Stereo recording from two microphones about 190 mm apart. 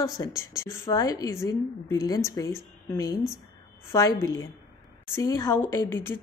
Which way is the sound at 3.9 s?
15° left (ahead or behind).